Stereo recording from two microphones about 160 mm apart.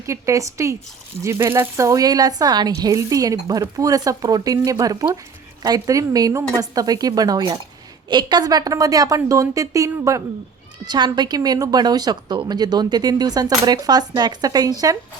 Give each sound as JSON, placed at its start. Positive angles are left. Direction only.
{"t": 0.0, "sound": "speech", "side_deg": -20}